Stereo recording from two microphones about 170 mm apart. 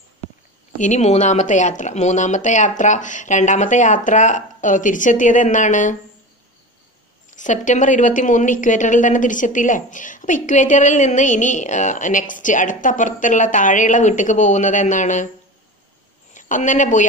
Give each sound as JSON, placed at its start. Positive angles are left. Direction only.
{"t": 0.7, "sound": "a woman's voice", "side_deg": 45}
{"t": 7.2, "sound": "a woman's voice", "side_deg": 45}
{"t": 16.3, "sound": "speech", "side_deg": 50}